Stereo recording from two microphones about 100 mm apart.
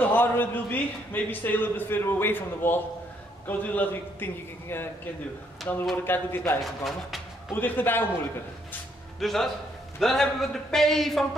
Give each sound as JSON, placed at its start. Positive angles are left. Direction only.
{"t": 0.0, "sound": "a man's voice", "side_deg": 20}
{"t": 6.6, "sound": "a man's voice", "side_deg": 0}
{"t": 7.5, "sound": "a man's voice", "side_deg": 20}
{"t": 9.2, "sound": "a man's voice", "side_deg": 0}